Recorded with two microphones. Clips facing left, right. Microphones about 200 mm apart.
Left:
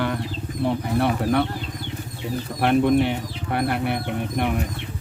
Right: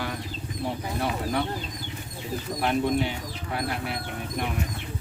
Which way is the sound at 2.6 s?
60° left (ahead or behind).